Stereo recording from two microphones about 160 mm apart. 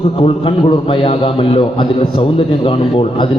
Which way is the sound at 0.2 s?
35° left (ahead or behind).